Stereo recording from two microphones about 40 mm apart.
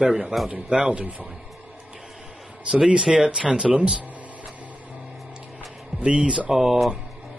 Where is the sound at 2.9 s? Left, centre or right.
Right.